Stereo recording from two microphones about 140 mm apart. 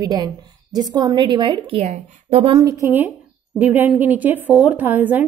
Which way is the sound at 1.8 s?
60° right (ahead or behind).